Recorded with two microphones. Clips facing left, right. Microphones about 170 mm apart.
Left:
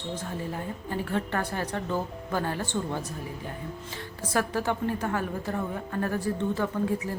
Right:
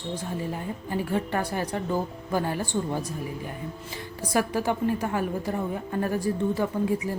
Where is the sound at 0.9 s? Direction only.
10° right (ahead or behind).